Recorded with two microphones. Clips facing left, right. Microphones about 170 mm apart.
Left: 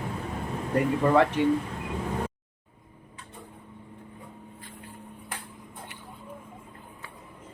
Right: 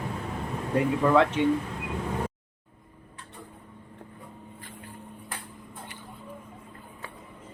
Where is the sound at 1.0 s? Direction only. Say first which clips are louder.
Even; 10° left (ahead or behind).